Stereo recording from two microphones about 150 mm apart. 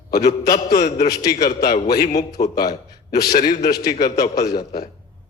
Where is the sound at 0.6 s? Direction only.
85° left.